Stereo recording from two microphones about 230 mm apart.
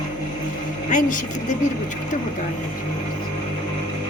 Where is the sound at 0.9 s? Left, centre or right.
Left.